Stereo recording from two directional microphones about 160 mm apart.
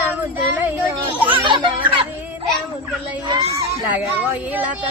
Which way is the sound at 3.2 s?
25° right (ahead or behind).